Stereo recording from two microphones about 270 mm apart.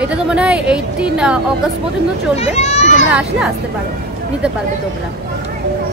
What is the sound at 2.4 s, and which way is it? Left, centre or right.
Speech, left.